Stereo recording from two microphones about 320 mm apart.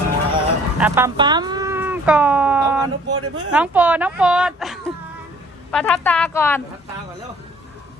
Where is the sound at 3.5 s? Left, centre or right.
Centre.